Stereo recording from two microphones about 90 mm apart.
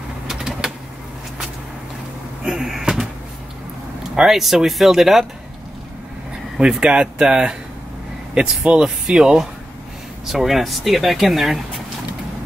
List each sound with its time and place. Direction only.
0.3 s a sound: 5° right (ahead or behind)
2.4 s speech: 5° right (ahead or behind)
4.1 s speech: 5° right (ahead or behind)
6.6 s speech: 10° right (ahead or behind)